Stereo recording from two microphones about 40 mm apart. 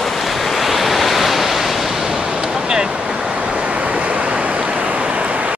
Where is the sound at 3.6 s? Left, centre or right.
Right.